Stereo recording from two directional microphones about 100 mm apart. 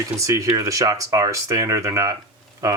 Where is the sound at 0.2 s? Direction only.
35° right (ahead or behind).